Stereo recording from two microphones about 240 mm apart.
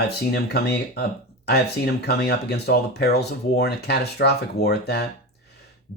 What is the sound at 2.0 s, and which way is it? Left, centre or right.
Speech, left.